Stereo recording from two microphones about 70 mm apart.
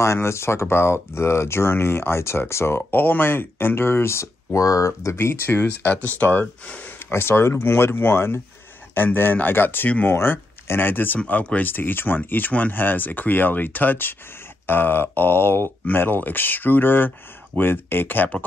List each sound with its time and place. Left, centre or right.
0.0 s speech: left
4.6 s speech: left
5.5 s speech: left
7.1 s speech: left
10.1 s speech: left